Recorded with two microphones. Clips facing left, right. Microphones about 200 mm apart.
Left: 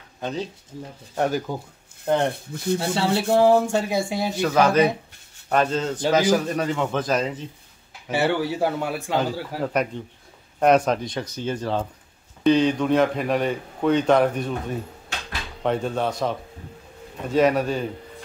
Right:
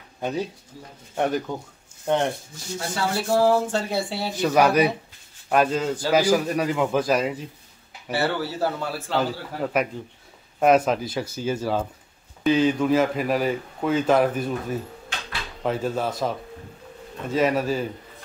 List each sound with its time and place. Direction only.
0.2 s speech: 15° right (ahead or behind)
1.1 s speech: centre (ahead or behind)
2.5 s speech: 55° left (ahead or behind)
2.8 s speech: 30° left (ahead or behind)
4.4 s a man's voice: 15° right (ahead or behind)
8.1 s speech: 15° left (ahead or behind)
9.7 s speech: 5° right (ahead or behind)